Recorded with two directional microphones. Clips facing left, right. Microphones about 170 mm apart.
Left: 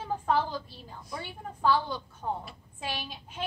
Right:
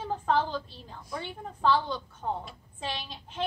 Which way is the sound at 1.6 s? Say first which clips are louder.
Right 1 dB; 10° left (ahead or behind).